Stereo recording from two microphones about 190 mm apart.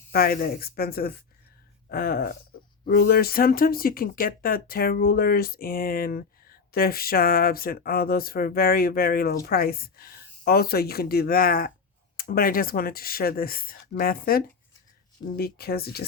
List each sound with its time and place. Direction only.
0.1 s speech: 50° left (ahead or behind)